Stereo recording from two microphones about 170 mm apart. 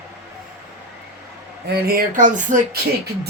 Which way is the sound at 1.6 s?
65° right (ahead or behind).